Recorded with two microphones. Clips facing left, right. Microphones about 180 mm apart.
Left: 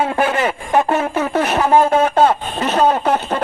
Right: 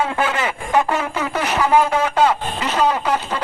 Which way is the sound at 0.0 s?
20° left (ahead or behind).